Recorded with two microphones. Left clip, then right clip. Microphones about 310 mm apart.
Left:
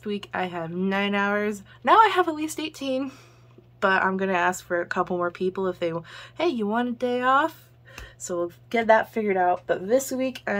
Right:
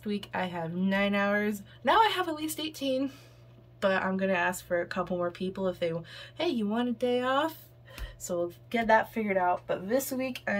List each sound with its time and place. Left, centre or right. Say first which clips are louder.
0.0 s speech: left 4 dB; centre